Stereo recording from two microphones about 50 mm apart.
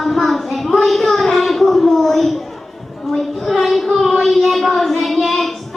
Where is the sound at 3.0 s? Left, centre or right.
Centre.